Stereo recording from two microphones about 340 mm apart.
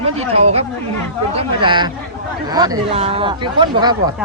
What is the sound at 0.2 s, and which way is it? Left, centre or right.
Speech, centre.